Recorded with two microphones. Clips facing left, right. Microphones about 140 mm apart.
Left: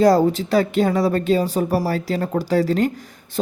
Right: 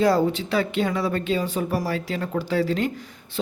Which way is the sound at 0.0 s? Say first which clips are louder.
Left 5 dB; 40° left (ahead or behind).